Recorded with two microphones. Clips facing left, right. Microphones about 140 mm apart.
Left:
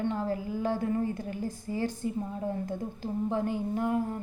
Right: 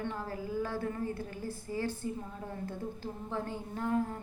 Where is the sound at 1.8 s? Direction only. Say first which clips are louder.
Left 4 dB; 15° left (ahead or behind).